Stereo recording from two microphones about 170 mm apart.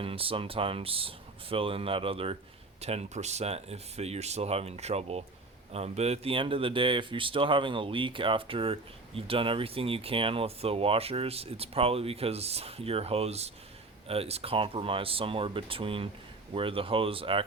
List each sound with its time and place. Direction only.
0.0 s speech: 35° right (ahead or behind)